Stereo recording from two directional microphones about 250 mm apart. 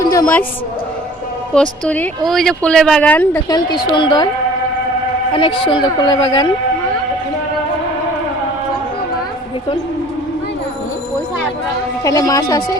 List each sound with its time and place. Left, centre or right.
0.0 s a sound: centre
1.8 s a woman's voice: centre
5.3 s speech: left
12.0 s a woman's voice: centre